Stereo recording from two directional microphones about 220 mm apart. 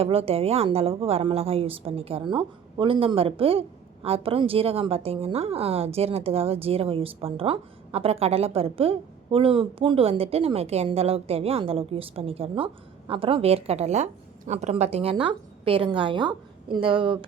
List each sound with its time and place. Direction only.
0.0 s a woman's voice: 25° right (ahead or behind)